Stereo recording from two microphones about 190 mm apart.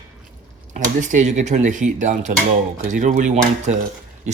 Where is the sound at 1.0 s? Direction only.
40° right (ahead or behind).